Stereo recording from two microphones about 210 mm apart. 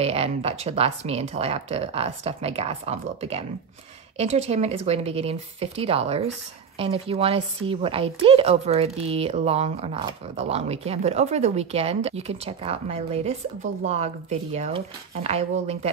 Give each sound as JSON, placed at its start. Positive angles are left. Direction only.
{"t": 0.0, "sound": "a woman's voice", "side_deg": -30}